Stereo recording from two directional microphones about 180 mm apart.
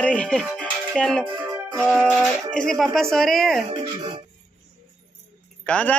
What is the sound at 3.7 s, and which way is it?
Speech, 25° right (ahead or behind).